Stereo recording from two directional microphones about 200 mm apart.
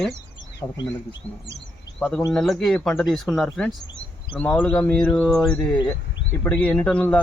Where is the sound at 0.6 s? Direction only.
20° left (ahead or behind).